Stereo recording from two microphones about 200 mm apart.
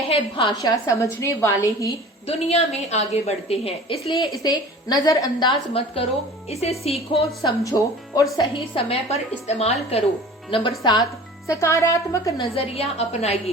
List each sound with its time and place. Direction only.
0.1 s speech: 25° left (ahead or behind)
0.9 s a woman's voice: 15° left (ahead or behind)
2.2 s a woman's voice: 30° left (ahead or behind)
4.4 s a woman's voice: 20° left (ahead or behind)
7.4 s a woman's voice: 15° left (ahead or behind)
12.5 s a woman's voice: 30° left (ahead or behind)